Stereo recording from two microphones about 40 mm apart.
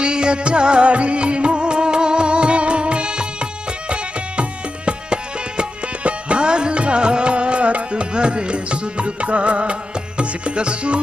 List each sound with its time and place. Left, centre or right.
0.0 s music: right